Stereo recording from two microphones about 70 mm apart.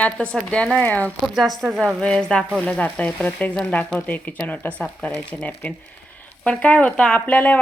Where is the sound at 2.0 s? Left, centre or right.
Centre.